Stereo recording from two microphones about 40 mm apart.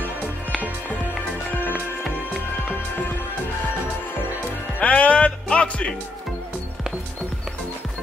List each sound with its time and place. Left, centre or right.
1.5 s music: left
4.7 s music: left